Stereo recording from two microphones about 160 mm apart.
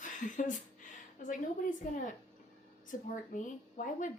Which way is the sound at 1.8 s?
50° left (ahead or behind).